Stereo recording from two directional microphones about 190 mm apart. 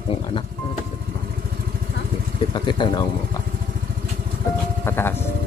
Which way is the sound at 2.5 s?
25° left (ahead or behind).